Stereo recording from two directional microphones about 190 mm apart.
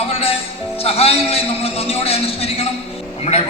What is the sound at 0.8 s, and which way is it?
A man's voice, 30° left (ahead or behind).